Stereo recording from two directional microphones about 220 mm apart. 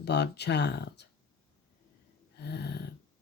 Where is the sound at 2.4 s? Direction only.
50° left (ahead or behind).